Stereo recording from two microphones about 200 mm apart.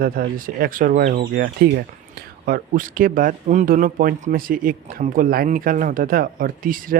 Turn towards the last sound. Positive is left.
turn(degrees=-45)  # may be behind; listen again after turning